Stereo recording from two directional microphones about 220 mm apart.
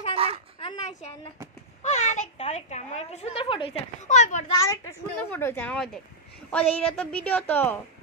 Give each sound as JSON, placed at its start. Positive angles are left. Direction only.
{"t": 0.1, "sound": "a sound", "side_deg": -25}
{"t": 0.6, "sound": "a woman's voice", "side_deg": 25}
{"t": 4.6, "sound": "a woman's voice", "side_deg": 10}